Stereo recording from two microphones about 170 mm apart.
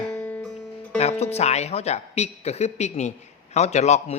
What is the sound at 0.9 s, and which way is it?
Speech, 40° left (ahead or behind).